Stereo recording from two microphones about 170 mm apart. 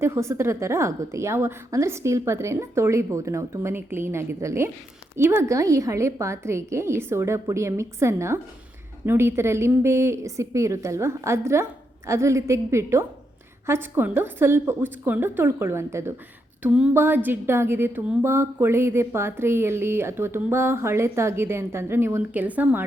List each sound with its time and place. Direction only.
0.0 s speech: 15° right (ahead or behind)